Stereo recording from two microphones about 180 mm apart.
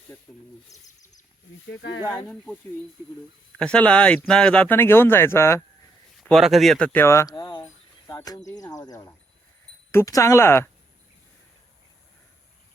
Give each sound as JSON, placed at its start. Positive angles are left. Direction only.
{"t": 0.7, "sound": "speech", "side_deg": 20}
{"t": 1.7, "sound": "speech", "side_deg": 90}
{"t": 2.0, "sound": "speech", "side_deg": 20}
{"t": 2.3, "sound": "speech", "side_deg": 5}
{"t": 3.6, "sound": "speech", "side_deg": 5}
{"t": 6.2, "sound": "speech", "side_deg": 0}